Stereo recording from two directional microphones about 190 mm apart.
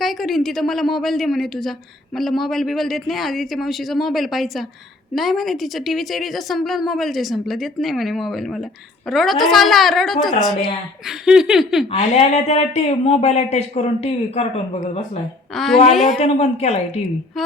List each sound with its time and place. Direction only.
0.0 s a woman's voice: centre (ahead or behind)
11.9 s speech: 35° left (ahead or behind)
15.5 s a woman's voice: centre (ahead or behind)
16.2 s speech: 35° left (ahead or behind)